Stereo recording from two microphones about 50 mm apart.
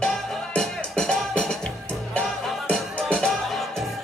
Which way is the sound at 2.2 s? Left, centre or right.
Centre.